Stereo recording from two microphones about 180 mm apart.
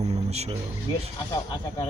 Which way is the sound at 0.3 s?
35° right (ahead or behind).